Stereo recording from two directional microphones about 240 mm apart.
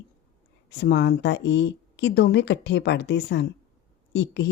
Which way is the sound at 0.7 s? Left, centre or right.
Left.